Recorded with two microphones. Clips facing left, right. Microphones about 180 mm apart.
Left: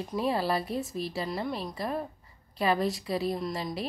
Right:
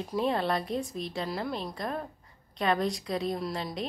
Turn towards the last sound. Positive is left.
turn(degrees=5)  # may be behind; listen again after turning